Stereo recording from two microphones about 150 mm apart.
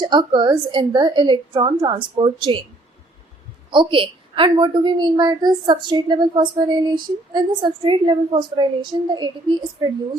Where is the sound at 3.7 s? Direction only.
35° right (ahead or behind).